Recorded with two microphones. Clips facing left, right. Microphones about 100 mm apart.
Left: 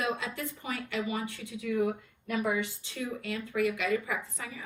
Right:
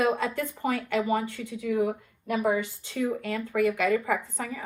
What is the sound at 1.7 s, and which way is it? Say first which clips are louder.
Speech: right 3 dB; 35° right (ahead or behind).